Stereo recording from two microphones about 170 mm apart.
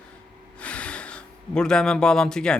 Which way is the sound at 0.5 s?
5° left (ahead or behind).